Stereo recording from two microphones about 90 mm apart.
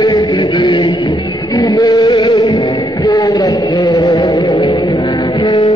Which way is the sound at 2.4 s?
40° left (ahead or behind).